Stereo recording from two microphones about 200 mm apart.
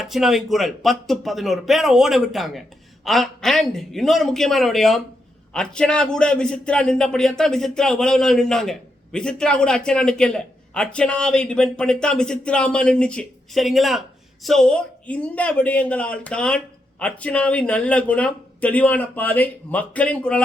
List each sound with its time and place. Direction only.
0.0 s a man's voice: centre (ahead or behind)